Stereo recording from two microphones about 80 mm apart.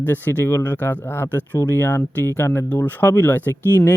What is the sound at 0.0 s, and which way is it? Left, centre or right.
Speech, left.